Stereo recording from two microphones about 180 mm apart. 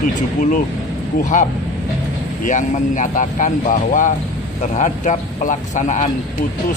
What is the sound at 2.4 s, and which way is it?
Speech, 45° left (ahead or behind).